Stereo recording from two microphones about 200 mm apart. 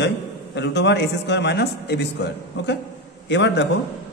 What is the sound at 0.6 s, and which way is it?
A man's voice, 60° left (ahead or behind).